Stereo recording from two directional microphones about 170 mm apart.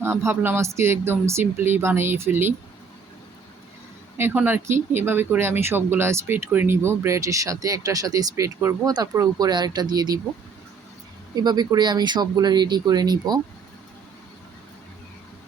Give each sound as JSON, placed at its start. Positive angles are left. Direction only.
{"t": 0.0, "sound": "speech", "side_deg": -15}
{"t": 4.2, "sound": "speech", "side_deg": -10}
{"t": 11.3, "sound": "speech", "side_deg": -25}